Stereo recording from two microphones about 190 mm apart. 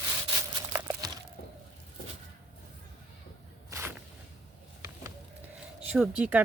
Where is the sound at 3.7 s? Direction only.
15° right (ahead or behind).